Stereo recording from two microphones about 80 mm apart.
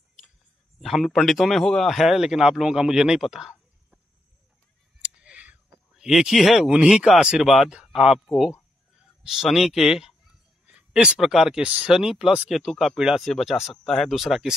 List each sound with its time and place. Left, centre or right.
0.7 s speech: centre
5.0 s a sound: centre
6.7 s speech: centre
9.2 s speech: centre